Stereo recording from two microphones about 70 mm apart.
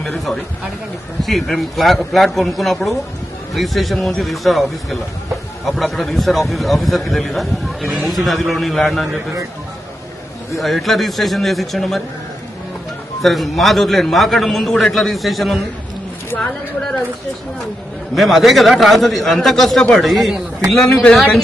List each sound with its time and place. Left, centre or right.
0.0 s a man's voice: centre
10.5 s a man's voice: centre
13.2 s a man's voice: centre
18.1 s a man's voice: centre